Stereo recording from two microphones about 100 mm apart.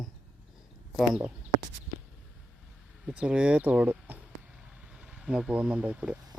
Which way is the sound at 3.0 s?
10° right (ahead or behind).